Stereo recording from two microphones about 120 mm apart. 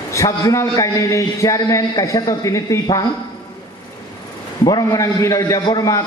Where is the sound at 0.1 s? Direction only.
25° left (ahead or behind).